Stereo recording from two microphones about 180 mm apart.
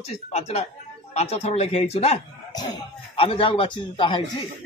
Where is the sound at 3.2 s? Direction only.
30° left (ahead or behind).